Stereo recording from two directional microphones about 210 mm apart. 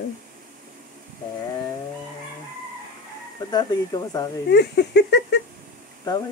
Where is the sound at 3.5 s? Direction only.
20° left (ahead or behind).